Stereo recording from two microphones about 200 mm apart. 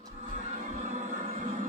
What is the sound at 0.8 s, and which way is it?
Music, 35° right (ahead or behind).